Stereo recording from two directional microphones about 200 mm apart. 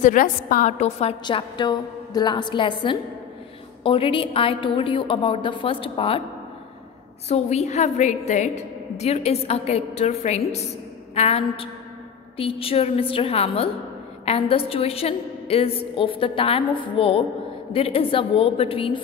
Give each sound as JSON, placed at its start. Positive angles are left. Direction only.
{"t": 0.0, "sound": "a woman's voice", "side_deg": 45}
{"t": 7.2, "sound": "a woman's voice", "side_deg": 35}